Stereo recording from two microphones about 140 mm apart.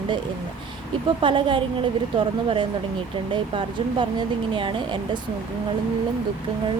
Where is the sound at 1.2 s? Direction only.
35° right (ahead or behind).